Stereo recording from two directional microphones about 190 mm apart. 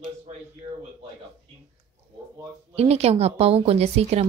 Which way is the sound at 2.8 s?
35° right (ahead or behind).